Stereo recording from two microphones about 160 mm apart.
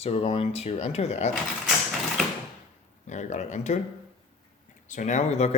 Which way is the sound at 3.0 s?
50° left (ahead or behind).